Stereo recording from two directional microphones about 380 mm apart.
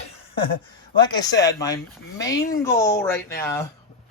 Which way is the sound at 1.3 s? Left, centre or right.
Left.